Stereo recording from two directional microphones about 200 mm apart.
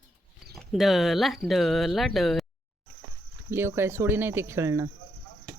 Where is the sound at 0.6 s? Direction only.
Centre (ahead or behind).